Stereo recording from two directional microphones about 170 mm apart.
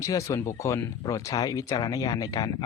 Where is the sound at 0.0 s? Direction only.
20° left (ahead or behind).